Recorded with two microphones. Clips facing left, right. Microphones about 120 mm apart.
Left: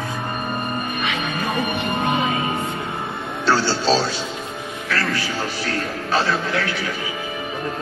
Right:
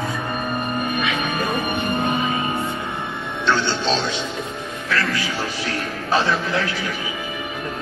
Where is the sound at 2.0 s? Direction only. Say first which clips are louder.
Left 1 dB; 90° left.